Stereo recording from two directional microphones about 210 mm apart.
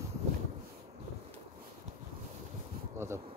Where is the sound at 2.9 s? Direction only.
10° right (ahead or behind).